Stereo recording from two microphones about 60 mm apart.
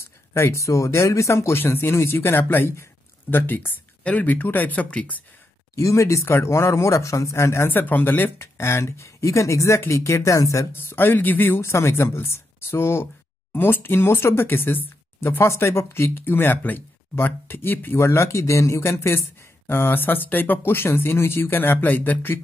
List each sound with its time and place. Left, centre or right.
0.3 s speech: left
1.6 s speech: left
5.8 s speech: left
7.7 s speech: left
10.7 s speech: left
15.1 s speech: left